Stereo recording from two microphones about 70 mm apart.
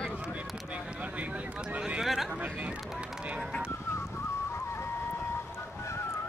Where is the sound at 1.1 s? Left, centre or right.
Right.